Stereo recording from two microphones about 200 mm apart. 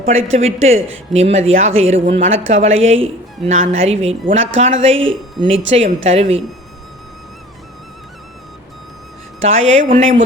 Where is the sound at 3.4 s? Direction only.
35° right (ahead or behind).